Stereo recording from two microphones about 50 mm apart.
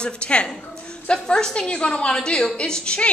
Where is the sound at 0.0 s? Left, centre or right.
Left.